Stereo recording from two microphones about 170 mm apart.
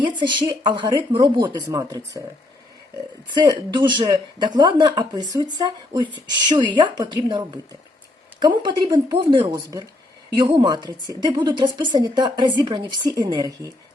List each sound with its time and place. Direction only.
0.0 s a woman's voice: 25° right (ahead or behind)
3.2 s a woman's voice: 25° right (ahead or behind)